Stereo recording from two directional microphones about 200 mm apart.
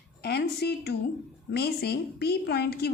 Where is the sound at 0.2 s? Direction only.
55° left (ahead or behind).